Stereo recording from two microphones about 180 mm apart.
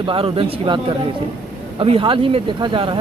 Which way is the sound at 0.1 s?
30° right (ahead or behind).